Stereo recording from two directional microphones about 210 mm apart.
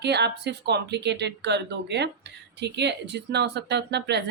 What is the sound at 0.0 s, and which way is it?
Speech, 55° right (ahead or behind).